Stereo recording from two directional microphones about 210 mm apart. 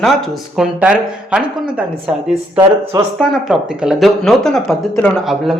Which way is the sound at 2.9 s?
15° right (ahead or behind).